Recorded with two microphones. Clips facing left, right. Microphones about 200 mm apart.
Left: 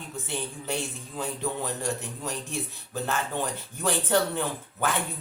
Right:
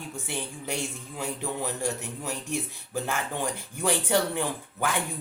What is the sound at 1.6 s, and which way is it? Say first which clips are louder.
A man's voice: even; 10° right (ahead or behind).